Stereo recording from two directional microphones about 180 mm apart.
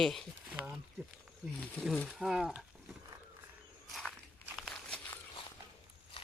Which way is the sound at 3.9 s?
5° left (ahead or behind).